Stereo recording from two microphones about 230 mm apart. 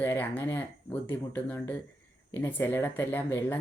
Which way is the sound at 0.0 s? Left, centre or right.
Centre.